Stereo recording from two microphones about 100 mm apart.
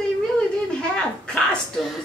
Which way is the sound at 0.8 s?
10° left (ahead or behind).